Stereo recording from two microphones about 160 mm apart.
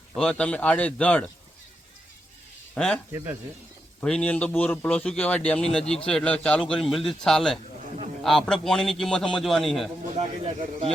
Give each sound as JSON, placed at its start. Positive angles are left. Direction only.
{"t": 0.2, "sound": "a man's voice", "side_deg": 5}
{"t": 2.7, "sound": "a man's voice", "side_deg": 5}
{"t": 3.1, "sound": "speech", "side_deg": -15}
{"t": 4.0, "sound": "a man's voice", "side_deg": 5}
{"t": 10.2, "sound": "a man's voice", "side_deg": -35}